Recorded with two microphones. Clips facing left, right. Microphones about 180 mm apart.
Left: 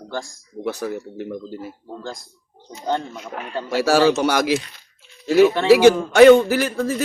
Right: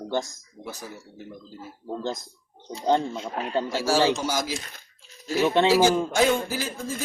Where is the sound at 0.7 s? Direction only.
70° left (ahead or behind).